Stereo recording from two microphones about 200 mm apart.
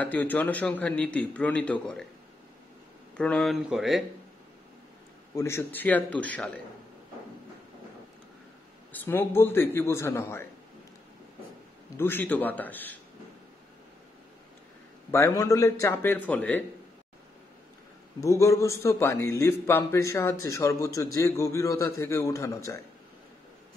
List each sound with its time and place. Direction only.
0.0 s a man's voice: 10° left (ahead or behind)
3.2 s speech: 5° left (ahead or behind)
5.3 s a man's voice: 15° left (ahead or behind)
8.9 s a man's voice: 10° left (ahead or behind)
12.0 s a man's voice: 10° left (ahead or behind)
15.0 s a man's voice: 15° left (ahead or behind)
18.2 s a man's voice: 15° left (ahead or behind)